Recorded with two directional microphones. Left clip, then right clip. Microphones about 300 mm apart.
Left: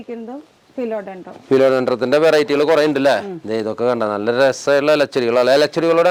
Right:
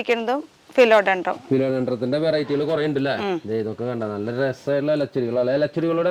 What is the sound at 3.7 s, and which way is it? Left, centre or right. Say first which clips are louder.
A man's voice: left 9 dB; centre.